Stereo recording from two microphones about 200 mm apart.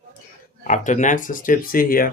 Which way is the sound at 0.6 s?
40° left (ahead or behind).